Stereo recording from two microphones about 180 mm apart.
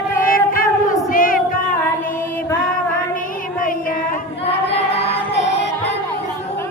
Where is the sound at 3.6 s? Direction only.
50° left (ahead or behind).